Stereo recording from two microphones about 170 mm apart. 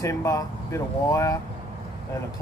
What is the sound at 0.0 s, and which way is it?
Speech, 15° left (ahead or behind).